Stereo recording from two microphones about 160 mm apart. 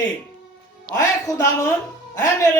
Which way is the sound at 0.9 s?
20° left (ahead or behind).